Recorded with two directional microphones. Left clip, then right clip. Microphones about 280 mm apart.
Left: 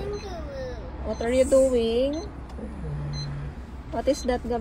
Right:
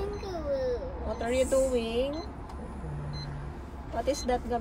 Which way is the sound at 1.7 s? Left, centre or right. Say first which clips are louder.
Left 6 dB; left.